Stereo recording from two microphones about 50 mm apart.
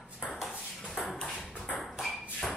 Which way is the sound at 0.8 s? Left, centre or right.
Centre.